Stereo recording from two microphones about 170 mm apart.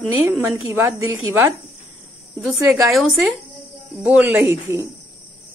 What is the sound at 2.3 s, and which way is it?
Speech, centre (ahead or behind).